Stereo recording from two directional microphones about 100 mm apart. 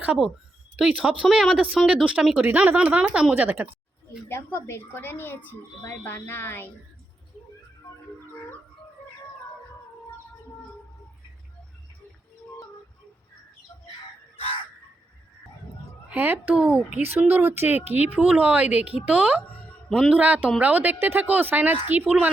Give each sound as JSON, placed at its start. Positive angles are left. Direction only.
{"t": 0.0, "sound": "speech", "side_deg": -15}
{"t": 4.5, "sound": "speech", "side_deg": 25}
{"t": 16.0, "sound": "speech", "side_deg": -20}
{"t": 19.5, "sound": "music", "side_deg": 5}
{"t": 20.1, "sound": "speech", "side_deg": -15}